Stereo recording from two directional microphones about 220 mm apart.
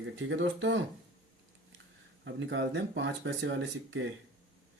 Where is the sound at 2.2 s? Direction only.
55° right (ahead or behind).